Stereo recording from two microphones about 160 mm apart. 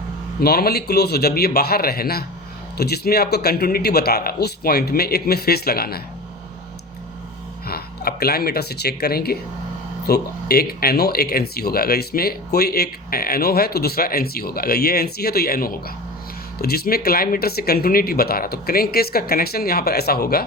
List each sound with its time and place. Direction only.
0.3 s speech: 75° left (ahead or behind)
7.7 s speech: 75° left (ahead or behind)